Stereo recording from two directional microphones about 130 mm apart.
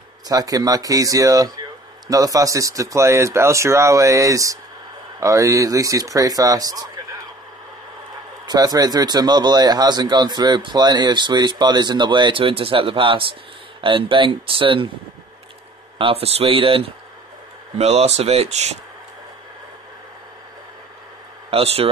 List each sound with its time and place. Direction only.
0.3 s a man's voice: 30° right (ahead or behind)
8.5 s a man's voice: 30° right (ahead or behind)
16.0 s speech: 50° right (ahead or behind)
17.7 s speech: 55° right (ahead or behind)
21.5 s speech: 45° right (ahead or behind)